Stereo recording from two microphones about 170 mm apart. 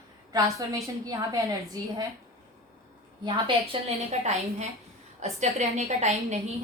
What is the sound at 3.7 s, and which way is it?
A woman's voice, 40° right (ahead or behind).